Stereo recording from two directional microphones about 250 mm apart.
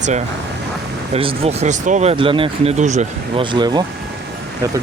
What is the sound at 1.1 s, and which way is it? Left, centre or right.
Speech, right.